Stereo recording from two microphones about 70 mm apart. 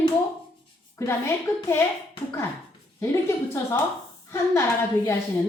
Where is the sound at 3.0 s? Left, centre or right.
Left.